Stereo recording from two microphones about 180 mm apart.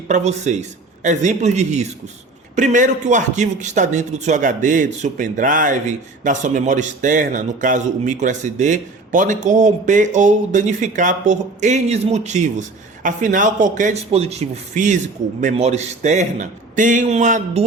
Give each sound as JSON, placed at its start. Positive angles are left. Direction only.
{"t": 0.1, "sound": "a man's voice", "side_deg": -40}